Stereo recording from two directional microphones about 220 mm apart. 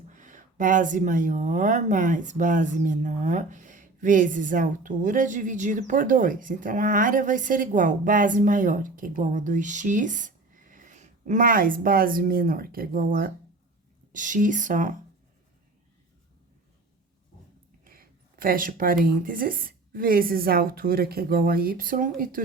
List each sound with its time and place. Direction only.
0.1 s speech: 35° right (ahead or behind)
17.8 s a sound: 40° right (ahead or behind)
19.0 s speech: 40° right (ahead or behind)